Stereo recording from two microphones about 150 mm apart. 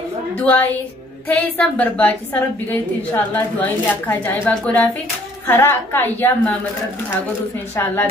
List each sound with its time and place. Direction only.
0.4 s a woman's voice: 10° left (ahead or behind)
7.7 s a woman's voice: 15° left (ahead or behind)